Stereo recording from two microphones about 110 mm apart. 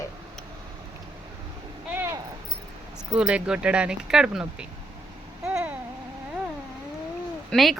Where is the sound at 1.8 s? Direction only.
15° right (ahead or behind).